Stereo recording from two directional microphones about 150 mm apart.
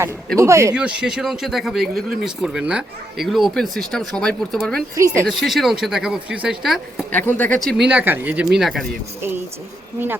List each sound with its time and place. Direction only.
0.3 s speech: 20° right (ahead or behind)
0.8 s speech: 5° right (ahead or behind)
4.9 s speech: 20° right (ahead or behind)
5.3 s speech: centre (ahead or behind)
7.1 s speech: 10° left (ahead or behind)
7.8 s speech: 10° right (ahead or behind)
8.5 s speech: centre (ahead or behind)